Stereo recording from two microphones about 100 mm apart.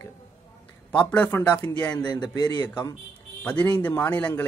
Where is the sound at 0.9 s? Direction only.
10° left (ahead or behind).